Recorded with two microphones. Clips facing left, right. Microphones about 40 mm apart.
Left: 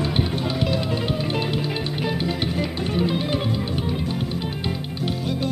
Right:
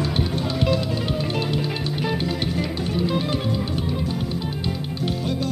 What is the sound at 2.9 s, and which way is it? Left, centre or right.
Music, left.